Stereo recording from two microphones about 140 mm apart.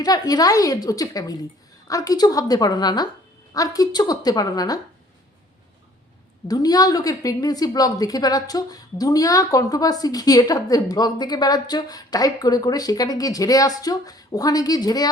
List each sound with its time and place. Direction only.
0.0 s a woman's voice: 25° left (ahead or behind)
6.5 s a woman's voice: 25° left (ahead or behind)